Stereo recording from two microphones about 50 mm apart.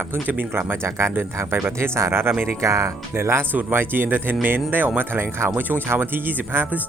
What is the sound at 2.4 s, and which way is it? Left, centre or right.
Speech, right.